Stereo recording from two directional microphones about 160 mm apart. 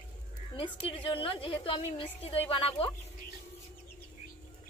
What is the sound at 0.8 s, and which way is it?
A woman's voice, 35° left (ahead or behind).